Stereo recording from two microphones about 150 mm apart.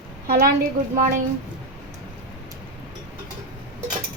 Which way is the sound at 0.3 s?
90° right.